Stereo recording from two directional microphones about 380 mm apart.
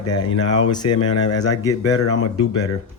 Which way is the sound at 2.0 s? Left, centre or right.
Left.